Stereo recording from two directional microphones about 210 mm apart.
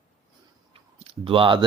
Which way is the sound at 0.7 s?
25° right (ahead or behind).